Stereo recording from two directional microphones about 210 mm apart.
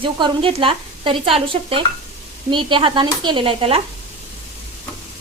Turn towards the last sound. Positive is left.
turn(degrees=-25)  # may be behind; listen again after turning